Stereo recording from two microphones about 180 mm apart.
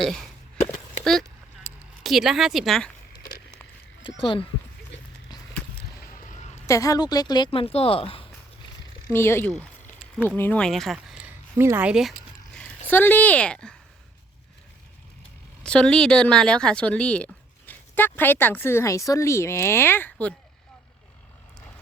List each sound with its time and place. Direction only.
0.0 s speech: centre (ahead or behind)
2.0 s speech: centre (ahead or behind)
4.2 s speech: 30° left (ahead or behind)
6.7 s speech: 20° left (ahead or behind)
9.1 s a woman's voice: 15° left (ahead or behind); by 12.1 s 5° right (ahead or behind)
12.9 s a woman's voice: 10° left (ahead or behind)
15.6 s a woman's voice: 5° left (ahead or behind)